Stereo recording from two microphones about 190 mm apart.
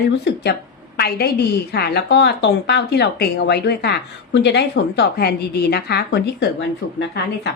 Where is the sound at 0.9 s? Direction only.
55° left (ahead or behind).